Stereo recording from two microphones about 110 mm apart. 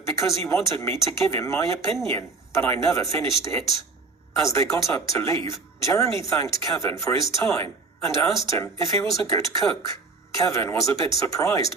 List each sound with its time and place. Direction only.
0.0 s speech: 25° left (ahead or behind)